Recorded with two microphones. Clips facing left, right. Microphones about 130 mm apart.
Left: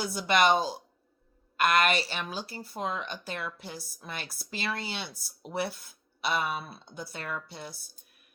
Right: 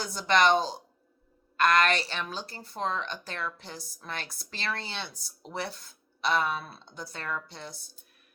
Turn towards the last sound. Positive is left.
turn(degrees=10)  # may be behind; listen again after turning